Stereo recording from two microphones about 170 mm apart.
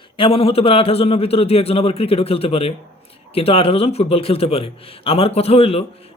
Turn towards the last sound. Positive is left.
turn(degrees=35)  # may be behind; listen again after turning